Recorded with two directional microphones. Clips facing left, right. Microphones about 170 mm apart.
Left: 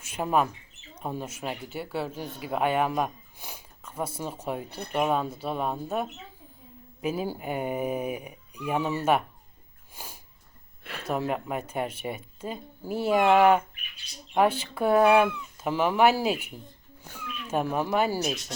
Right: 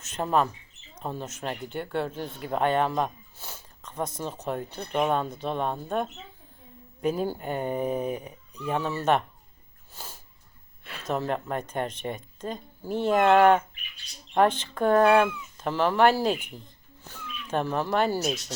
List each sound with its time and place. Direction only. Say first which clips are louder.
0.0 s speech: even; 10° left (ahead or behind)
9.9 s snort: even; 10° left (ahead or behind)
11.0 s speech: even; 10° left (ahead or behind)